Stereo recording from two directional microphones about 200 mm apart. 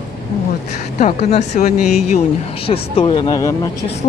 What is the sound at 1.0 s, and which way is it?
Speech, 35° left (ahead or behind).